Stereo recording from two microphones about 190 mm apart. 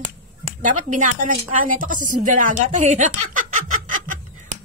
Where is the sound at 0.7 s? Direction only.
40° right (ahead or behind).